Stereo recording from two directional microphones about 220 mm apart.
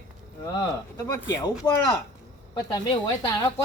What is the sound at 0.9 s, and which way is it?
Speech, 15° left (ahead or behind).